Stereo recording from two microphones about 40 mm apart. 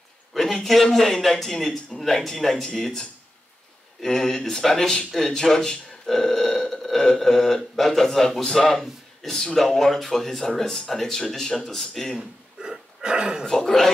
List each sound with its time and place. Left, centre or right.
0.4 s speech: centre
12.2 s a sound: centre
13.5 s speech: centre